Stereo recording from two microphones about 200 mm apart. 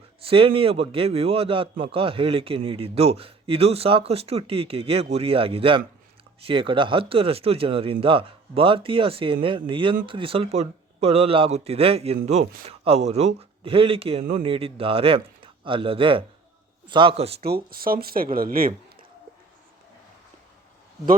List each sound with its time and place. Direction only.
0.3 s a man's voice: 25° right (ahead or behind)
17.4 s speech: 50° right (ahead or behind)